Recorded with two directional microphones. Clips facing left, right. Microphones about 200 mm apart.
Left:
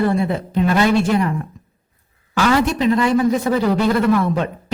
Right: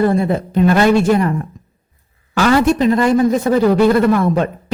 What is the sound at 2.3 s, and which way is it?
A man's voice, 45° right (ahead or behind).